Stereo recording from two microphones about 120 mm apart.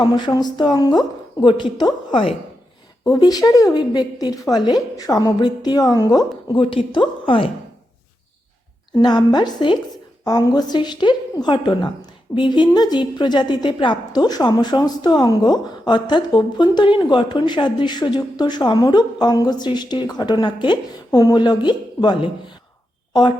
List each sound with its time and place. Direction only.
0.0 s speech: 35° left (ahead or behind)
8.9 s speech: 35° left (ahead or behind)